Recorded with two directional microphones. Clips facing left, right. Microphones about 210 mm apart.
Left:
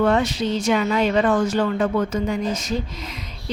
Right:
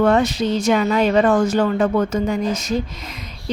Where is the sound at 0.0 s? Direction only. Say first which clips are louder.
Right 3 dB; 45° right (ahead or behind).